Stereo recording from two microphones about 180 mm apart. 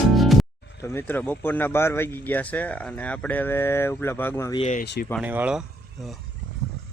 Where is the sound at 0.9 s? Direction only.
10° left (ahead or behind).